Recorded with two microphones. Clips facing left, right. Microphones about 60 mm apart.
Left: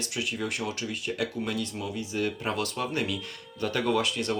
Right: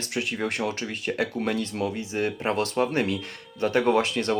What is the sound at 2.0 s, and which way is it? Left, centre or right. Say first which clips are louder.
Speech: right 3 dB; right.